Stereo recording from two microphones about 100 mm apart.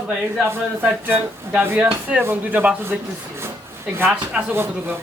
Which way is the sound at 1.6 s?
15° right (ahead or behind).